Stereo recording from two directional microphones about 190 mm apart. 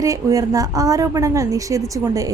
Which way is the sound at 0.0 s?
15° right (ahead or behind).